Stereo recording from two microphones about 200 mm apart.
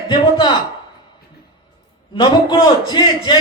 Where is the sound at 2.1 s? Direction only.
25° left (ahead or behind).